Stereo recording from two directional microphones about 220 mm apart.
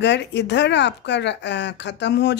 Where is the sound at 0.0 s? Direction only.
50° left (ahead or behind).